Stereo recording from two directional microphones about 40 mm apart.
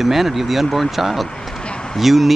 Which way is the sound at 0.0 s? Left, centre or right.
Centre.